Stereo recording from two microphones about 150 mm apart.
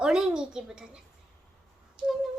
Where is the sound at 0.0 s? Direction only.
5° right (ahead or behind).